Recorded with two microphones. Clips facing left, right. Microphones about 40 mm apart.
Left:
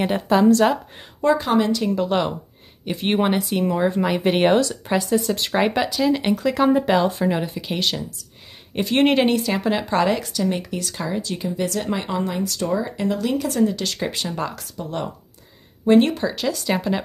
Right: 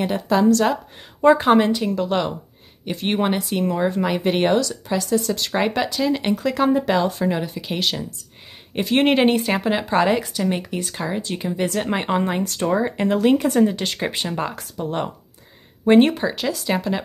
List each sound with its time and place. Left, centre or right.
0.0 s speech: centre
1.2 s speech: right
1.9 s speech: centre
4.2 s speech: centre
4.6 s speech: left
5.5 s speech: centre
9.3 s speech: right
9.6 s speech: centre
11.6 s speech: right
15.8 s speech: right
16.1 s speech: centre